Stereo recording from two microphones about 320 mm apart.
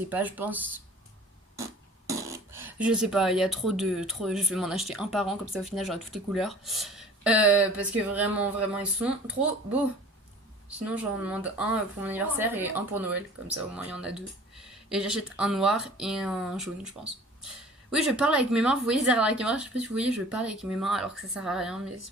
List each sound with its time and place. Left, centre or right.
0.1 s speech: centre
17.9 s speech: centre